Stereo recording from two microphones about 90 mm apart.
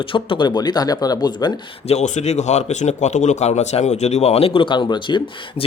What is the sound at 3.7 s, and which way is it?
Speech, 90° left.